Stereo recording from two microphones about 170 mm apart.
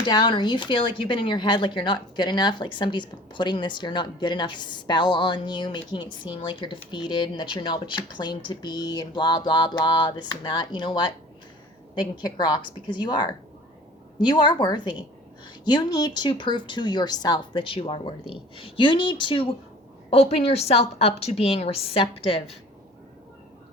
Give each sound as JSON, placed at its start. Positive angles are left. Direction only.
{"t": 0.0, "sound": "a woman's voice", "side_deg": 25}